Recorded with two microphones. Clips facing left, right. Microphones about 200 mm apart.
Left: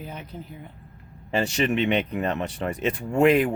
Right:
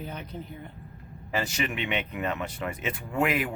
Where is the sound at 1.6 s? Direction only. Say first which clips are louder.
Left 8 dB; 40° left (ahead or behind).